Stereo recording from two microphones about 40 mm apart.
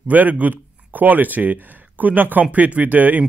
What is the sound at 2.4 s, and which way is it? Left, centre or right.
Speech, right.